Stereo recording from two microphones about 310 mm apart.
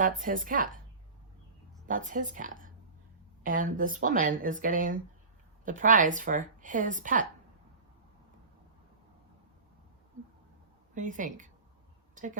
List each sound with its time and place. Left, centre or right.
0.0 s a woman's voice: right
1.9 s a woman's voice: right
10.9 s a woman's voice: right
12.1 s a sound: right